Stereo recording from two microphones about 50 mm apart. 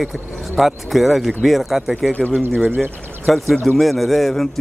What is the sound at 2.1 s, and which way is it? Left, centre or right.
Speech, left.